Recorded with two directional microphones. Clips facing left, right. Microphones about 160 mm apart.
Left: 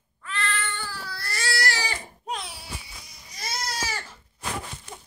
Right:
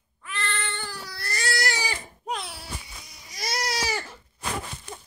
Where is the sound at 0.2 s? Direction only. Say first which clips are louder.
Left 2 dB; 20° right (ahead or behind).